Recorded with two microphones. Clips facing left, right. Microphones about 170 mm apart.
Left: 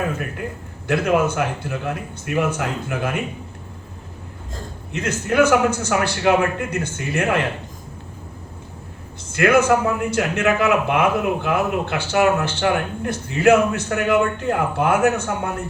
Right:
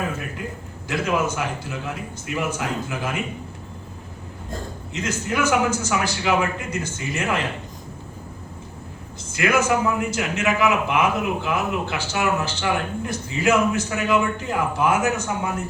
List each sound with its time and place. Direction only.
0.0 s a man's voice: 60° left (ahead or behind)
4.9 s a man's voice: 60° left (ahead or behind)
9.3 s a man's voice: 60° left (ahead or behind)